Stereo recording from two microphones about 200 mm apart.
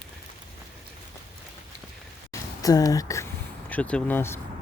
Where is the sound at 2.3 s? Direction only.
15° left (ahead or behind).